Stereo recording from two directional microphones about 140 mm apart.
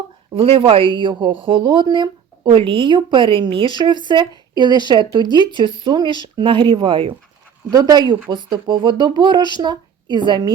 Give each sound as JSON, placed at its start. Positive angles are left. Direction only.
{"t": 0.3, "sound": "a woman's voice", "side_deg": -40}